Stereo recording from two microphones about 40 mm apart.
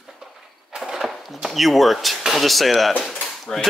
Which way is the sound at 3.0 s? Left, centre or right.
Centre.